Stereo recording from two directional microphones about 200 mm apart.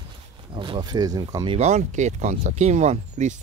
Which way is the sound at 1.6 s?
35° right (ahead or behind).